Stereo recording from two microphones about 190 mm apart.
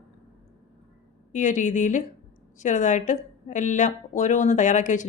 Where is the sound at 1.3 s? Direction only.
40° left (ahead or behind).